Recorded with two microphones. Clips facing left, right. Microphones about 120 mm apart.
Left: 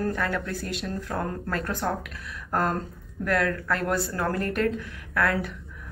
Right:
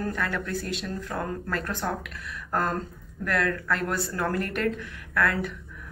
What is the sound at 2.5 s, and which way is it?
Speech, 30° left (ahead or behind).